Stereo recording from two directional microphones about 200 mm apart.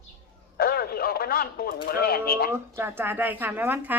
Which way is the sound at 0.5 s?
50° left (ahead or behind).